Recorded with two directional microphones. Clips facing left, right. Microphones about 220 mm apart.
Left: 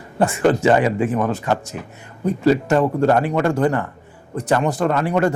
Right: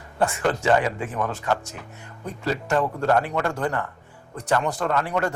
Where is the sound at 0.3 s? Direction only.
5° left (ahead or behind).